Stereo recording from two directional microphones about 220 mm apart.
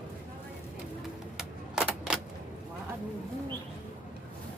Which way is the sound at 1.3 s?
5° right (ahead or behind).